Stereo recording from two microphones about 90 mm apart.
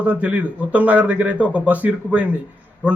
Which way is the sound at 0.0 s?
15° right (ahead or behind).